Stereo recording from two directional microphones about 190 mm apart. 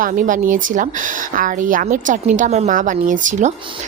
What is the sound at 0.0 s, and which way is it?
A woman's voice, 45° right (ahead or behind).